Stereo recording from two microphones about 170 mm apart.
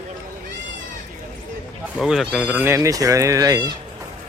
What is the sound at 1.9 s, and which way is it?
Speech, centre (ahead or behind).